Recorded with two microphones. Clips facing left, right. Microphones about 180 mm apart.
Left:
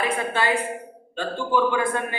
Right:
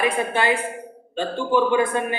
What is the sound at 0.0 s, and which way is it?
A man's voice, 20° right (ahead or behind).